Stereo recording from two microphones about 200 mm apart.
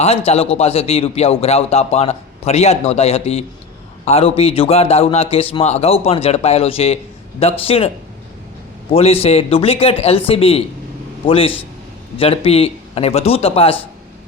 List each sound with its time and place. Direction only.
0.3 s a man's voice: 30° left (ahead or behind)
8.9 s a man's voice: 30° left (ahead or behind)